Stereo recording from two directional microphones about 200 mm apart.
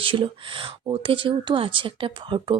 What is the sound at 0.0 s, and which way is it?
Speech, 25° right (ahead or behind).